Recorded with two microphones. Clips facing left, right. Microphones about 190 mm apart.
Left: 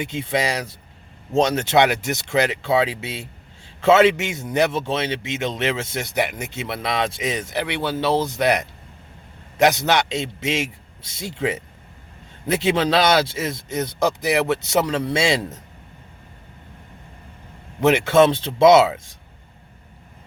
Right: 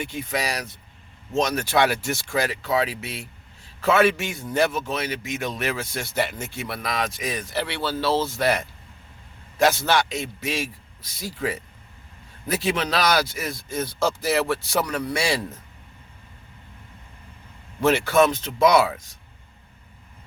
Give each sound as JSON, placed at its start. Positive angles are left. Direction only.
{"t": 0.0, "sound": "speech", "side_deg": 25}
{"t": 17.7, "sound": "speech", "side_deg": 20}